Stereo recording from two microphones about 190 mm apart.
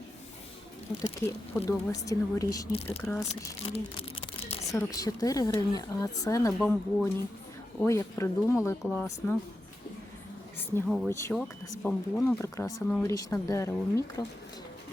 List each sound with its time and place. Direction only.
1.3 s speech: 15° left (ahead or behind)
3.7 s a sound: 30° left (ahead or behind)
4.7 s speech: 15° left (ahead or behind)
10.8 s speech: centre (ahead or behind)
11.1 s speech: 15° left (ahead or behind)